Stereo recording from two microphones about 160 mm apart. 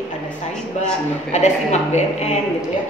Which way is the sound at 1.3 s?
45° left (ahead or behind).